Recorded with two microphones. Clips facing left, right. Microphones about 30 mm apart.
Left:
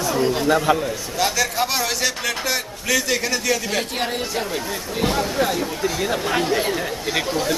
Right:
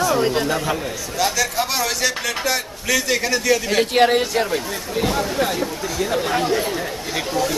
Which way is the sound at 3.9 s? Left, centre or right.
Right.